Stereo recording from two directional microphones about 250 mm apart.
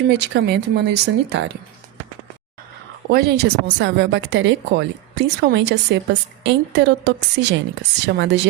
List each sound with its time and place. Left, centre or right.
0.1 s speech: right
3.1 s speech: right